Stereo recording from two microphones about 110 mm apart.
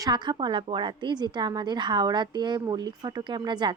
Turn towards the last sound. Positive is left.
turn(degrees=-45)  # may be behind; listen again after turning